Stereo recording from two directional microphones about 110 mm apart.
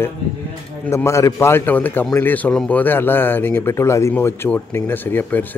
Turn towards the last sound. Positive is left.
turn(degrees=15)  # may be behind; listen again after turning